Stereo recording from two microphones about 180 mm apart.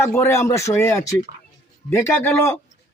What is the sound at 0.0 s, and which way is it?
Speech, 15° left (ahead or behind).